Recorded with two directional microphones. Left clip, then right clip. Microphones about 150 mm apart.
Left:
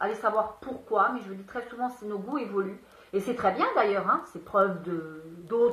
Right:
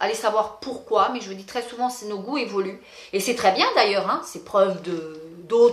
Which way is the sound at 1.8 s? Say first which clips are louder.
Right 5 dB; 35° right (ahead or behind).